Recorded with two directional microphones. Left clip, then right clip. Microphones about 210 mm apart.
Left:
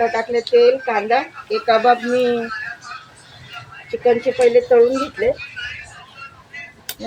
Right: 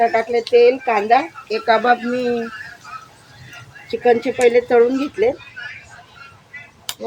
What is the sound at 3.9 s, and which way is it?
Speech, 50° right (ahead or behind).